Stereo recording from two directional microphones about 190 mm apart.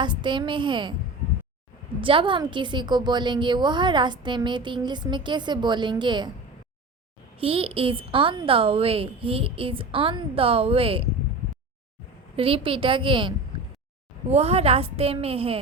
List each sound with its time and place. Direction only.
0.0 s a woman's voice: 25° right (ahead or behind)
2.0 s a woman's voice: 25° right (ahead or behind)
7.3 s a woman's voice: 30° right (ahead or behind)
12.4 s a woman's voice: 30° right (ahead or behind)